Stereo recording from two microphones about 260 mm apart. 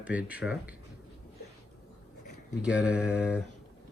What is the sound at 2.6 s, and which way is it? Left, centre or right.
Speech, centre.